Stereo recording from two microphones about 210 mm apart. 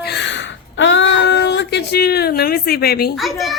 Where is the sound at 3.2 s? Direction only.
Centre (ahead or behind).